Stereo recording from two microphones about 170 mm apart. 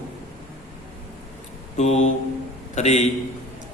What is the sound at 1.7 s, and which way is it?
Mantra, 40° left (ahead or behind).